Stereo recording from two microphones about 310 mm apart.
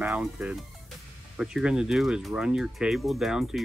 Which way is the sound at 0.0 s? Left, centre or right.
Centre.